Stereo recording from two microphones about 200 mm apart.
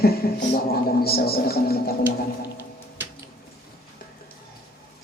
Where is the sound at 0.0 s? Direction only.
50° left (ahead or behind).